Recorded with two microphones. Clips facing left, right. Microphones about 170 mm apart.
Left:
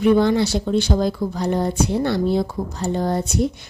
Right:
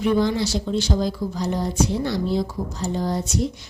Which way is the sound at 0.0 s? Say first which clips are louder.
Left 4 dB; 60° left (ahead or behind).